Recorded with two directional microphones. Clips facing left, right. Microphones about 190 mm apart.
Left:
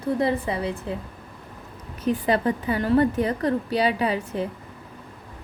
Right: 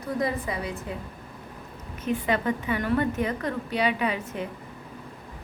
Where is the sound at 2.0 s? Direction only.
35° left (ahead or behind).